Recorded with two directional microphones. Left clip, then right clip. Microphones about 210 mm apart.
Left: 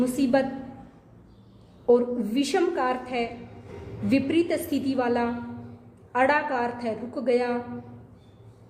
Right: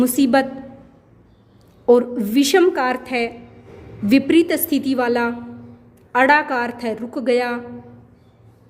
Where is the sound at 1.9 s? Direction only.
45° right (ahead or behind).